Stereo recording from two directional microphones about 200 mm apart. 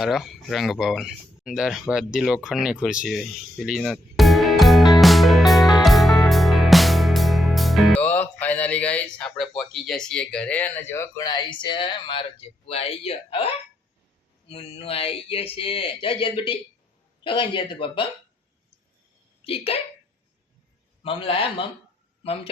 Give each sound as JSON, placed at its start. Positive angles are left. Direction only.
{"t": 0.0, "sound": "speech", "side_deg": 0}
{"t": 5.8, "sound": "music", "side_deg": 0}
{"t": 14.4, "sound": "speech", "side_deg": 30}
{"t": 19.5, "sound": "speech", "side_deg": 30}
{"t": 21.0, "sound": "speech", "side_deg": 25}